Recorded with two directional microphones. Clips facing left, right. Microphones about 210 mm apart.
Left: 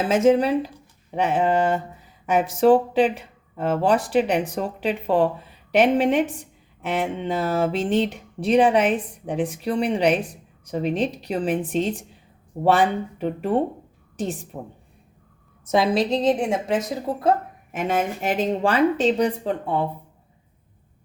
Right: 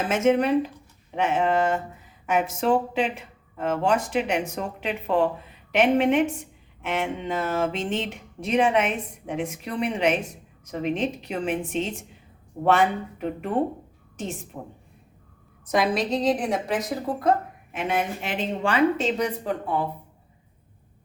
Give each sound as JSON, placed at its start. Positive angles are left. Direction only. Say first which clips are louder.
{"t": 0.1, "sound": "speech", "louder": "left 3 dB", "side_deg": 35}
{"t": 15.6, "sound": "a woman's voice", "louder": "left 3 dB", "side_deg": 25}
{"t": 17.7, "sound": "speech", "louder": "left 3 dB", "side_deg": 45}